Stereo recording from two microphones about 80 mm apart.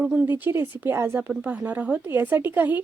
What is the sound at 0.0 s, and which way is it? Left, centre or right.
Speech, centre.